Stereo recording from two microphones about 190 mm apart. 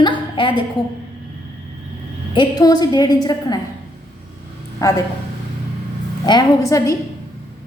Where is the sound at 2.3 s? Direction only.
20° left (ahead or behind).